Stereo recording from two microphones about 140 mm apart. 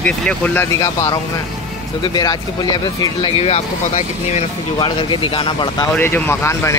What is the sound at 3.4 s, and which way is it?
Speech, 50° left (ahead or behind).